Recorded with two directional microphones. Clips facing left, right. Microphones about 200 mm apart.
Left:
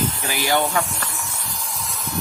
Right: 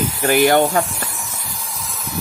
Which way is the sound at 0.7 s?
35° right (ahead or behind).